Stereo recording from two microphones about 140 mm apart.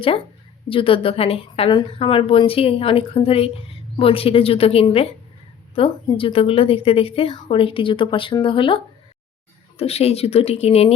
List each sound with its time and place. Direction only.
0.7 s a woman's voice: 40° left (ahead or behind)